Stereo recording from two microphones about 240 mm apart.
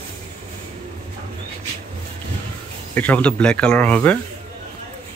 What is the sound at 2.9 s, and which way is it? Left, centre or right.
Speech, centre.